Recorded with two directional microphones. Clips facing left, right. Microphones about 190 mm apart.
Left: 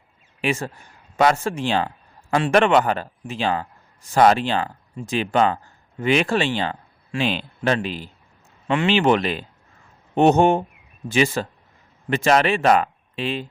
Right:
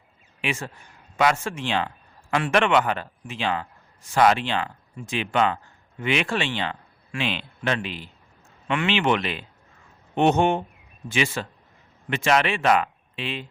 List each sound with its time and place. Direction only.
0.4 s a man's voice: 40° left (ahead or behind)